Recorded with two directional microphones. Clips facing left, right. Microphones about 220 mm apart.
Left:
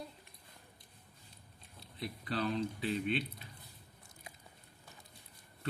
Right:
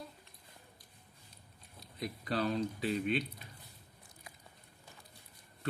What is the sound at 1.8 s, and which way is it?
Speech, 40° right (ahead or behind).